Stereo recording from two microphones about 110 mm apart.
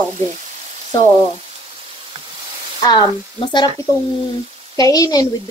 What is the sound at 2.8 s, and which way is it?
Speech, 45° left (ahead or behind).